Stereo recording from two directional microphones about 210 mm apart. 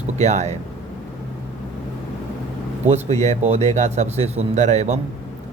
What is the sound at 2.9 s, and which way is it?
A man's voice, 30° right (ahead or behind).